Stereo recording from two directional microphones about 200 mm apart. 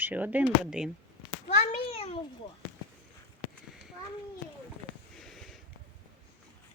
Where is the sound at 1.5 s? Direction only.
30° left (ahead or behind).